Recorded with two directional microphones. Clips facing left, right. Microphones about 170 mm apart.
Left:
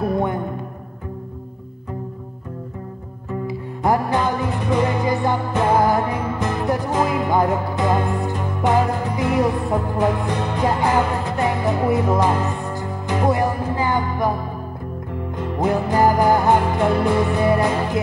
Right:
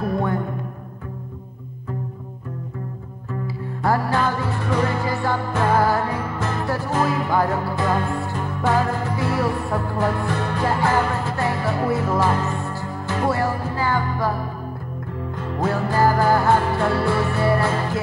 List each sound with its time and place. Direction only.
3.3 s music: 20° left (ahead or behind)
15.3 s music: 15° left (ahead or behind)